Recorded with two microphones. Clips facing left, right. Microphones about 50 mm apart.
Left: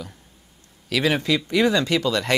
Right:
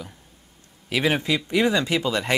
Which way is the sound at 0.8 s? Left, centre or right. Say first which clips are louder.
Left 1 dB; right.